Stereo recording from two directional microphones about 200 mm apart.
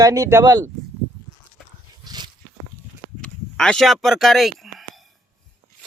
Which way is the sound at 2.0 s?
20° right (ahead or behind).